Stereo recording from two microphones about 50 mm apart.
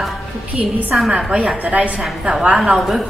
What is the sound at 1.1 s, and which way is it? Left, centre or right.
A woman's voice, right.